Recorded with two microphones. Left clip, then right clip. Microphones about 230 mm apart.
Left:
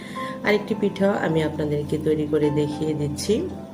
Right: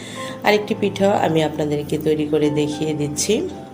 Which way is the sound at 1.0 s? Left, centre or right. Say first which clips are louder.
Right 6 dB; right.